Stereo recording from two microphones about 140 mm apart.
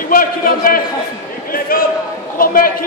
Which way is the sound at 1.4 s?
90° left.